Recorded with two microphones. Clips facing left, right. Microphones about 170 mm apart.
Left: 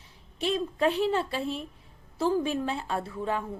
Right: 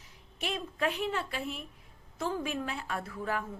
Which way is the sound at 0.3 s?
30° left (ahead or behind).